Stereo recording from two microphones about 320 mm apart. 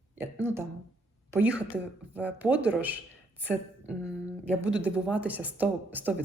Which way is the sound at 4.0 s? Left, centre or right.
Centre.